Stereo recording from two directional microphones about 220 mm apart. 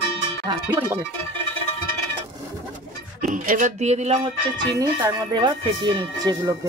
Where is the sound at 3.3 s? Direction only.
40° right (ahead or behind).